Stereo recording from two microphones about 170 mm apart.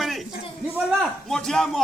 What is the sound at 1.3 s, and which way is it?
Speech, 5° left (ahead or behind).